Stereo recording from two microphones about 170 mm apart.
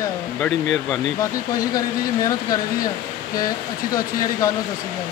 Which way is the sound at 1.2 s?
20° left (ahead or behind).